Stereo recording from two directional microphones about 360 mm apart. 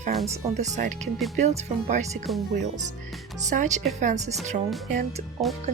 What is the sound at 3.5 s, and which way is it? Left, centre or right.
Speech, centre.